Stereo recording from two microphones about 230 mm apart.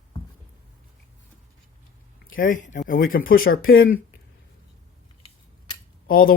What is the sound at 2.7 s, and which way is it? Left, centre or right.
Speech, left.